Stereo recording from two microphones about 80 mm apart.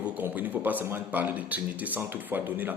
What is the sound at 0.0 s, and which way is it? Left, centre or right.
A man's voice, right.